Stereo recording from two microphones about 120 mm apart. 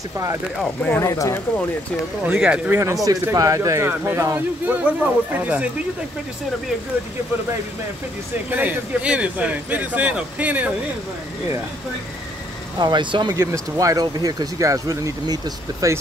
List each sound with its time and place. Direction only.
0.8 s speech: 15° left (ahead or behind)
1.1 s speech: 30° left (ahead or behind)
2.2 s speech: 10° right (ahead or behind)
2.7 s speech: 25° right (ahead or behind)
8.5 s speech: 15° right (ahead or behind)
12.7 s speech: 35° right (ahead or behind)
13.3 s speech: 25° right (ahead or behind)